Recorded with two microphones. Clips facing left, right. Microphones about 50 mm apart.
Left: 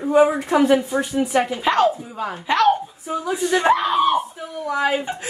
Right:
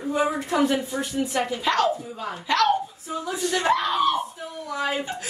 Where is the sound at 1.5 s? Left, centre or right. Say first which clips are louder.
Left 3 dB; left.